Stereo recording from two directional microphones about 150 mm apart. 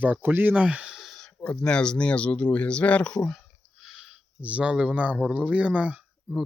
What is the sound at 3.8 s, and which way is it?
Speech, 5° right (ahead or behind).